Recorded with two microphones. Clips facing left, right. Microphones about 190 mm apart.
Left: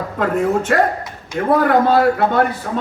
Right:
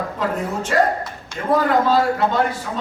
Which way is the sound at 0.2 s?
55° left (ahead or behind).